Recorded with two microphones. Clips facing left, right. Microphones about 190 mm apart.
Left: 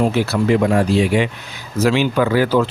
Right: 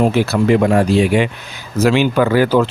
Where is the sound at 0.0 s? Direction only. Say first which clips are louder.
Right 3 dB; 60° right (ahead or behind).